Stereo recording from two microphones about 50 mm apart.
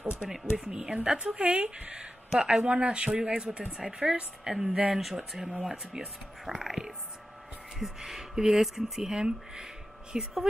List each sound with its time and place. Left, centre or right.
0.3 s speech: centre
0.9 s a woman's voice: right